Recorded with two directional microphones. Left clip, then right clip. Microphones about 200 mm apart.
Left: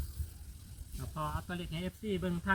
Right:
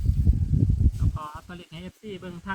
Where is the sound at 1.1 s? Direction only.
30° left (ahead or behind).